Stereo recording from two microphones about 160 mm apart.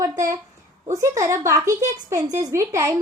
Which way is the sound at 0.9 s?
20° right (ahead or behind).